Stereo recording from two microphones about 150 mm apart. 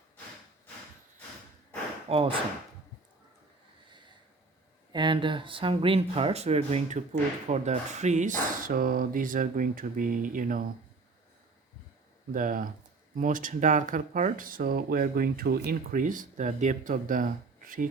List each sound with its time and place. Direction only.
2.0 s speech: 40° right (ahead or behind)
4.9 s speech: 30° right (ahead or behind); by 10.6 s 65° right (ahead or behind)
12.3 s speech: 65° right (ahead or behind)